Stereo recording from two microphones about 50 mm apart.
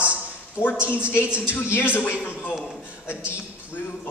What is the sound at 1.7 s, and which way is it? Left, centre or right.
Speech, left.